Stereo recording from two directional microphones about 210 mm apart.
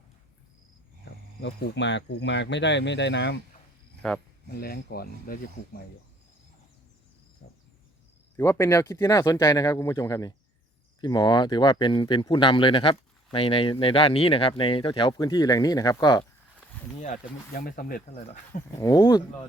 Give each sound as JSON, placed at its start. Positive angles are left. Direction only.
{"t": 1.4, "sound": "speech", "side_deg": 50}
{"t": 4.0, "sound": "speech", "side_deg": 5}
{"t": 4.5, "sound": "speech", "side_deg": 45}
{"t": 7.4, "sound": "a sound", "side_deg": 65}
{"t": 8.4, "sound": "speech", "side_deg": 10}
{"t": 17.7, "sound": "speech", "side_deg": 40}
{"t": 18.1, "sound": "speech", "side_deg": 30}
{"t": 18.8, "sound": "speech", "side_deg": 20}